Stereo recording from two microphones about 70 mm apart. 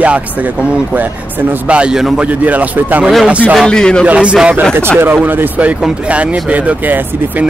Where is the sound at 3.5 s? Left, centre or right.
Centre.